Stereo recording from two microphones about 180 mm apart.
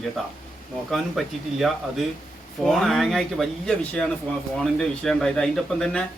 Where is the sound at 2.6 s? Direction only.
Centre (ahead or behind).